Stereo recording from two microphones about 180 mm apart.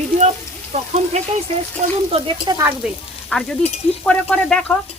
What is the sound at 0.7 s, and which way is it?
Speech, 40° right (ahead or behind).